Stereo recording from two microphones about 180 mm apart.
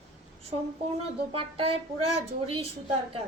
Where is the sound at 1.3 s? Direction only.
30° right (ahead or behind).